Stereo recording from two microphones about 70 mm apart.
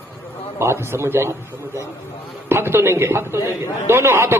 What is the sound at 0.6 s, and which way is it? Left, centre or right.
Speech, right.